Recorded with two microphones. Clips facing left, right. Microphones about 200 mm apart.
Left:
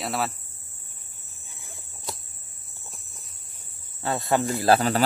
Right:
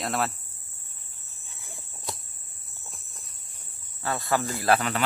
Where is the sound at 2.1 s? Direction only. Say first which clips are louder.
Even; centre (ahead or behind).